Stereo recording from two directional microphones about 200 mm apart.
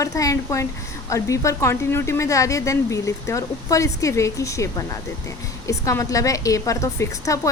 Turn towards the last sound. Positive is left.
turn(degrees=15)  # may be behind; listen again after turning